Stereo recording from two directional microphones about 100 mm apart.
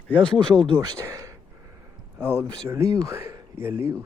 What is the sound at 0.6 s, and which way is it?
Speech, 45° right (ahead or behind).